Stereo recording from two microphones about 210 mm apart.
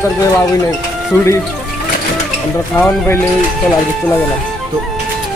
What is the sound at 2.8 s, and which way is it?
Speech, 10° left (ahead or behind).